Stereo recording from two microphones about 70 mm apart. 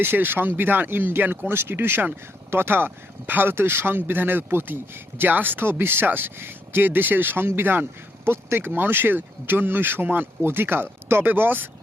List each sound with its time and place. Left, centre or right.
0.0 s speech: right